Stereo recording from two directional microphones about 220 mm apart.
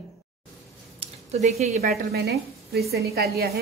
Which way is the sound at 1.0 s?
30° right (ahead or behind).